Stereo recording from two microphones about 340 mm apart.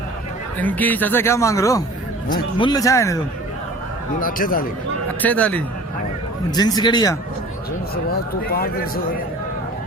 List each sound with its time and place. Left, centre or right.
0.6 s speech: centre
4.2 s a man's voice: left
5.2 s speech: centre
8.1 s a man's voice: left